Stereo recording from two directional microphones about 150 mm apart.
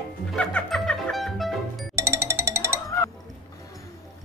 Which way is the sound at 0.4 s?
5° left (ahead or behind).